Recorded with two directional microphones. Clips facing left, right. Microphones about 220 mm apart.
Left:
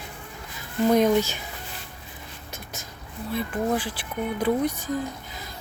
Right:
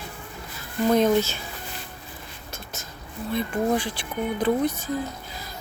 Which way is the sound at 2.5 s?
15° left (ahead or behind).